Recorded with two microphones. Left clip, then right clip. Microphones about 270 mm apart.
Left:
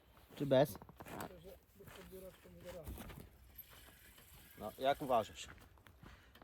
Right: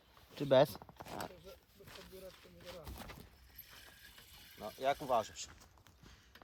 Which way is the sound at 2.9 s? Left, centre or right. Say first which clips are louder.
Right 3 dB; right.